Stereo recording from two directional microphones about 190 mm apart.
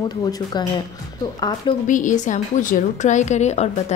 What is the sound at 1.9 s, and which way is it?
A woman's voice, 40° left (ahead or behind).